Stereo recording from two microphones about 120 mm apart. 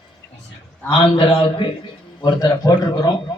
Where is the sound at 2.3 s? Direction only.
30° left (ahead or behind).